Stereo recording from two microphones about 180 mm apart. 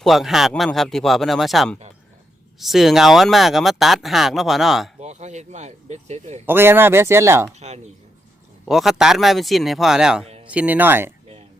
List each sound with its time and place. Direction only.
0.0 s speech: centre (ahead or behind)
4.9 s speech: 40° right (ahead or behind)
6.4 s speech: 10° right (ahead or behind)
7.6 s speech: 40° right (ahead or behind)
8.6 s speech: centre (ahead or behind)